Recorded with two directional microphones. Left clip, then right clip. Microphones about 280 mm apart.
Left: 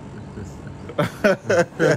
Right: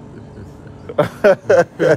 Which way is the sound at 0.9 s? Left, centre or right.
Centre.